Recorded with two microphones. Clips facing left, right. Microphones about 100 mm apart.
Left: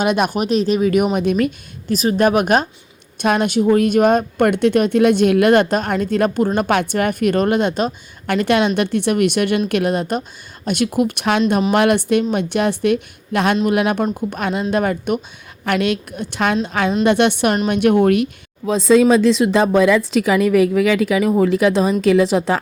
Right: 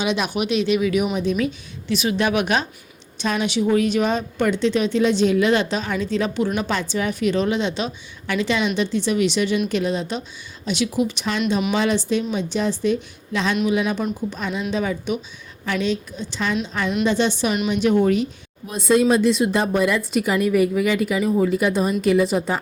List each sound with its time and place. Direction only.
0.0 s a woman's voice: 50° left (ahead or behind); by 22.6 s 90° left